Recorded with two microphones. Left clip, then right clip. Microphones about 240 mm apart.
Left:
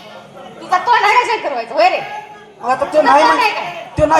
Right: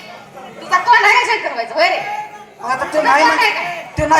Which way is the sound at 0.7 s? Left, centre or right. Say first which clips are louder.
Right 1 dB; right.